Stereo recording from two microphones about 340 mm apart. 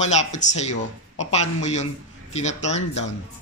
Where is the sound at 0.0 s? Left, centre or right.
Centre.